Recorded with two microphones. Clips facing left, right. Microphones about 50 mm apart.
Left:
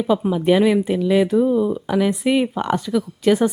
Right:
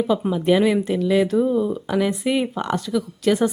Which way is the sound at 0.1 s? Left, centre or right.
Centre.